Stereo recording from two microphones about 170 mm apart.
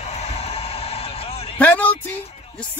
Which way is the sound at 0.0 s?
40° left (ahead or behind).